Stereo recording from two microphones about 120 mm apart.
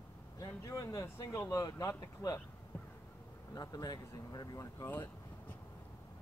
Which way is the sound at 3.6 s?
30° left (ahead or behind).